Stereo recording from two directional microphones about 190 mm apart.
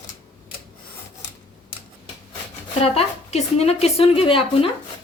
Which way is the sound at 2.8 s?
30° left (ahead or behind).